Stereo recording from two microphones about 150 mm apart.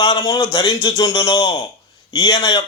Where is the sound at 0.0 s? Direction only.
25° left (ahead or behind).